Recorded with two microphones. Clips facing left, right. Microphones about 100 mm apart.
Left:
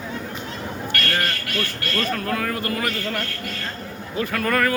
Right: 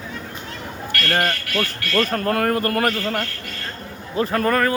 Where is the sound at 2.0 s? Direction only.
45° right (ahead or behind).